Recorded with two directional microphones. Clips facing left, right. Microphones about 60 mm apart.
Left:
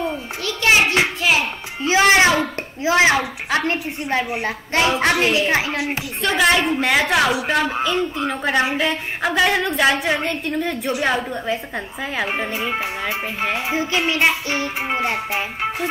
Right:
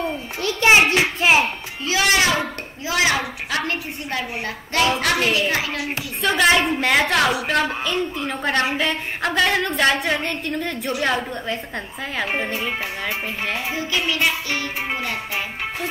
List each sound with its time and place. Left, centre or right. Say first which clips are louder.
0.4 s a sound: right 2 dB; right
1.9 s music: left 5 dB; left
2.8 s a woman's voice: left 5 dB; left
6.2 s a woman's voice: even; centre
13.4 s a woman's voice: left 4 dB; left